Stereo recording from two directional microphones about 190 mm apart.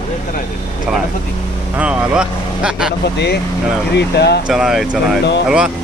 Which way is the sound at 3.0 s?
60° left (ahead or behind).